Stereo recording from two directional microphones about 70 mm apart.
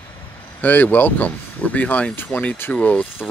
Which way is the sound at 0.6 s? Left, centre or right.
Left.